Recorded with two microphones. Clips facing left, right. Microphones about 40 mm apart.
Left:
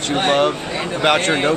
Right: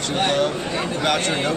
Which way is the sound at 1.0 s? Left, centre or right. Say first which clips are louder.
Left 7 dB; left.